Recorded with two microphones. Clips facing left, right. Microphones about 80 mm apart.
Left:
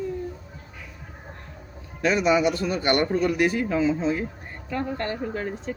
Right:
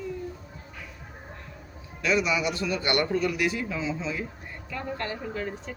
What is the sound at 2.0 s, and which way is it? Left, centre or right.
A man's voice, left.